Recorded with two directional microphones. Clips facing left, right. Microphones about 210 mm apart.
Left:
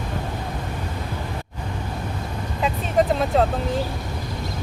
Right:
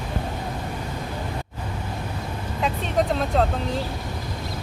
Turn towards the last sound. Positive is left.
turn(degrees=0)  # may be behind; listen again after turning